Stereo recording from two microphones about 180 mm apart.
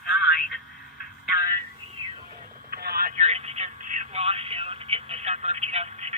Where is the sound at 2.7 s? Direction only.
55° right (ahead or behind).